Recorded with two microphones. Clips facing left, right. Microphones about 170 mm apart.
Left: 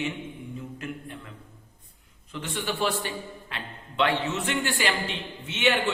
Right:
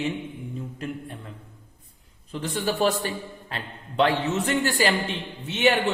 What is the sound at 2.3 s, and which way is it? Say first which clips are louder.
A man's voice: right 5 dB; 35° right (ahead or behind).